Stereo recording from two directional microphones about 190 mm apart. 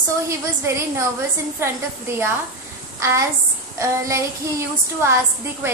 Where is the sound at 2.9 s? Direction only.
15° right (ahead or behind).